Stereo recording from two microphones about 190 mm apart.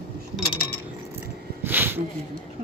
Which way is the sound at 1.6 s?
10° right (ahead or behind).